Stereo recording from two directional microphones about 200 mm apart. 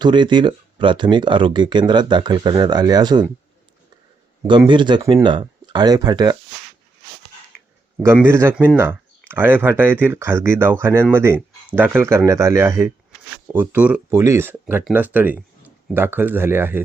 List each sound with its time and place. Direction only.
0.0 s speech: 25° right (ahead or behind)
4.4 s speech: 25° right (ahead or behind)
8.0 s speech: 10° right (ahead or behind)